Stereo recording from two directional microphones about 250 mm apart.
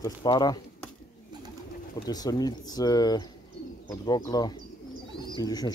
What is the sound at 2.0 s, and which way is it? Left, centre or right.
Speech, centre.